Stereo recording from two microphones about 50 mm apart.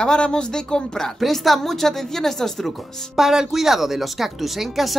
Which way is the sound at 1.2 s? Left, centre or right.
Centre.